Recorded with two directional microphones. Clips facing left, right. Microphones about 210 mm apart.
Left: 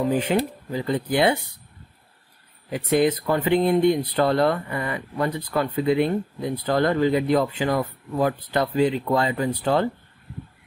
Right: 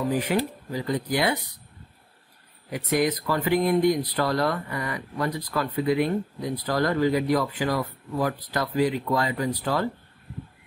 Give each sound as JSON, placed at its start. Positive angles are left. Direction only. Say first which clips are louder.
{"t": 0.1, "sound": "speech", "louder": "left 3 dB", "side_deg": 25}
{"t": 2.7, "sound": "speech", "louder": "left 4 dB", "side_deg": 30}